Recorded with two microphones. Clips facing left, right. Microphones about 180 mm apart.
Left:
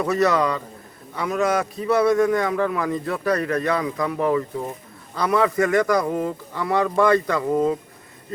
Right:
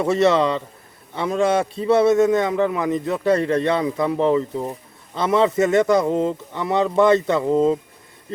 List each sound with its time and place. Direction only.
0.0 s a man's voice: 25° right (ahead or behind)